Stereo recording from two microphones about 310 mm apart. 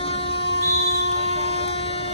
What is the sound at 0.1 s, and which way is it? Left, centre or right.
Train, centre.